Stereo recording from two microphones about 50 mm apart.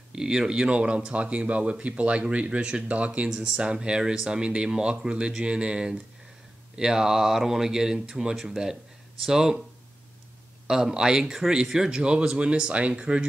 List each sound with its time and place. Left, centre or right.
0.1 s speech: centre
10.7 s speech: centre
11.8 s speech: centre